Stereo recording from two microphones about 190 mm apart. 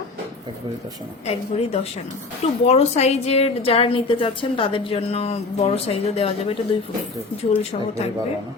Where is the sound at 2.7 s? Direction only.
35° left (ahead or behind).